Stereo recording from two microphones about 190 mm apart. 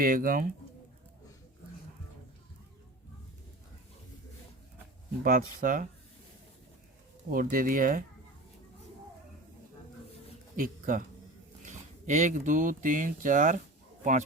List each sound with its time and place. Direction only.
0.0 s speech: 45° right (ahead or behind)
5.2 s speech: 45° right (ahead or behind)
7.3 s speech: 45° right (ahead or behind)
10.6 s speech: 45° right (ahead or behind)